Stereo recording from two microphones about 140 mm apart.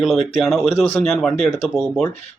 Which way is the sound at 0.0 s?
Centre (ahead or behind).